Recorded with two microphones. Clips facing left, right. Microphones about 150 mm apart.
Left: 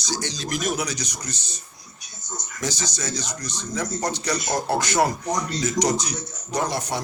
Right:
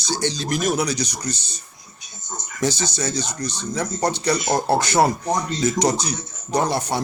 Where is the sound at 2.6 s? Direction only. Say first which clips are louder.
Right 6 dB; 30° right (ahead or behind).